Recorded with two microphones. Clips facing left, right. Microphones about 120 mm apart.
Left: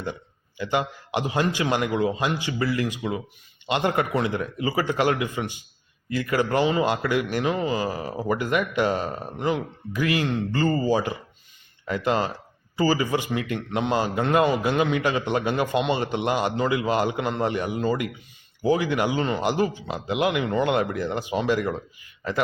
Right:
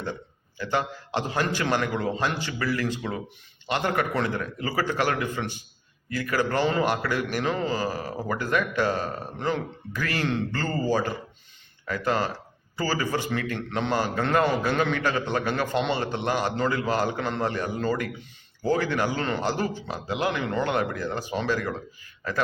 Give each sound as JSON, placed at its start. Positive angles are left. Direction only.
{"t": 0.0, "sound": "a man's voice", "side_deg": 15}